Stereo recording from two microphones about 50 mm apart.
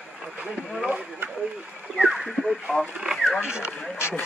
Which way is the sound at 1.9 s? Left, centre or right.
Centre.